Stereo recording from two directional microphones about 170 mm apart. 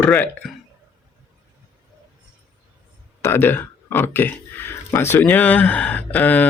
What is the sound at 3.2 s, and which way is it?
Speech, 15° left (ahead or behind).